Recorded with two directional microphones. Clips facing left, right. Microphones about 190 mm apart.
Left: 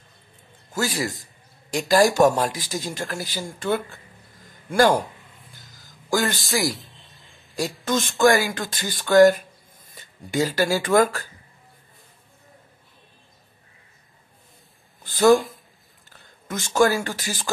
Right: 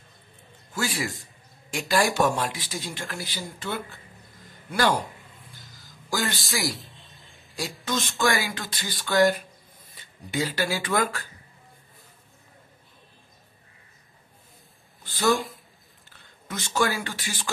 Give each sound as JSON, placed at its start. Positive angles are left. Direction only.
{"t": 0.7, "sound": "a man's voice", "side_deg": 40}
{"t": 6.0, "sound": "a man's voice", "side_deg": 50}
{"t": 6.5, "sound": "a sound", "side_deg": 0}
{"t": 7.8, "sound": "speech", "side_deg": 50}
{"t": 15.3, "sound": "speech", "side_deg": 0}
{"t": 16.4, "sound": "speech", "side_deg": 45}